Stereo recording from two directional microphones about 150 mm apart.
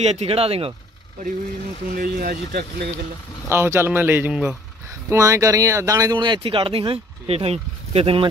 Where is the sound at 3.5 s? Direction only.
15° right (ahead or behind).